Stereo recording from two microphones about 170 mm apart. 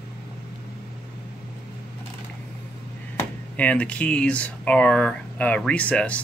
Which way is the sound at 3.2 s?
10° left (ahead or behind).